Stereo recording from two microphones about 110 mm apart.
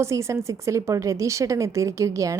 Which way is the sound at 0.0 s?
25° right (ahead or behind).